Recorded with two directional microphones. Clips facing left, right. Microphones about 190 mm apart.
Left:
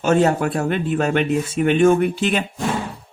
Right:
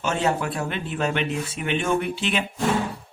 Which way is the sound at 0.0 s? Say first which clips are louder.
Left 7 dB; 45° left (ahead or behind).